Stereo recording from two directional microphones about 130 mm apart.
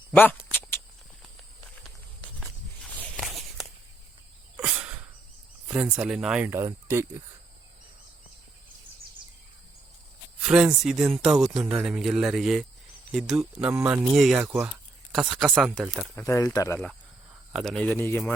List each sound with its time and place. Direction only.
0.1 s speech: 15° left (ahead or behind)
3.2 s walk: centre (ahead or behind)
4.5 s a sound: 10° right (ahead or behind)
5.7 s speech: 5° right (ahead or behind)
6.5 s speech: 20° right (ahead or behind)
10.4 s speech: 5° right (ahead or behind)
11.6 s speech: 15° right (ahead or behind)
11.9 s speech: 5° right (ahead or behind)
13.7 s speech: 20° right (ahead or behind)
14.1 s speech: centre (ahead or behind)
16.2 s speech: 25° left (ahead or behind)
17.5 s speech: 5° left (ahead or behind)